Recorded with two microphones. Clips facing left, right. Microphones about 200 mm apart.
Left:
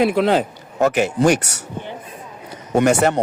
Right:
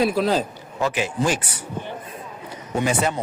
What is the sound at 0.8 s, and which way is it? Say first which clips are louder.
Speech: left 7 dB; 55° left (ahead or behind).